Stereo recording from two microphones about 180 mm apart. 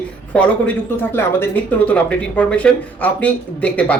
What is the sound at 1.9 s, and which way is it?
A man's voice, 5° left (ahead or behind).